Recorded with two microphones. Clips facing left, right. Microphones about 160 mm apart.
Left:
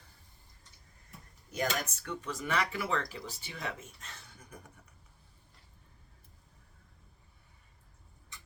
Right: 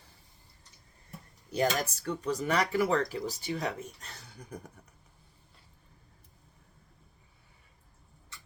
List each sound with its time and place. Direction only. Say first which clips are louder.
1.5 s speech: right 5 dB; 35° right (ahead or behind)